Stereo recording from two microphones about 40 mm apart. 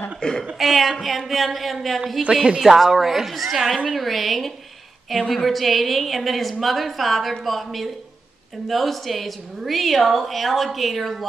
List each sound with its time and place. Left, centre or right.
0.2 s speech: left
0.6 s a woman's voice: centre
2.3 s a woman's voice: centre